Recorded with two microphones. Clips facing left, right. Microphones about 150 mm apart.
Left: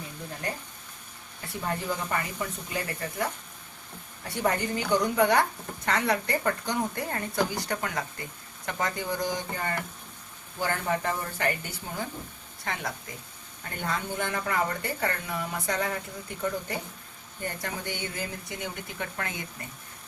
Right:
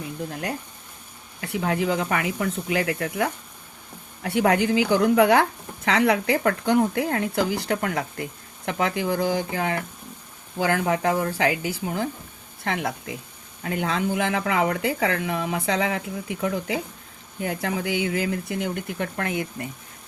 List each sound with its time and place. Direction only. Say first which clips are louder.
1.4 s speech: right 8 dB; 85° right
7.6 s speech: right 6 dB; 65° right (ahead or behind); by 12.0 s 85° right
12.6 s speech: right 7 dB; 75° right (ahead or behind)
13.6 s speech: right 7 dB; 90° right; by 19.6 s 65° right (ahead or behind)